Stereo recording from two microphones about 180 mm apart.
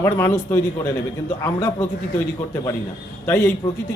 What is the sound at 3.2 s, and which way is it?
Speech, 15° left (ahead or behind).